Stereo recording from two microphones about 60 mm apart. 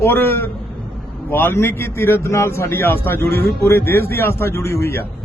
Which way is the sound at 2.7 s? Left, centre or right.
Left.